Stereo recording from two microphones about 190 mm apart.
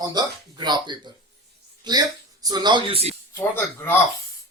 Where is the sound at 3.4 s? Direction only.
10° left (ahead or behind).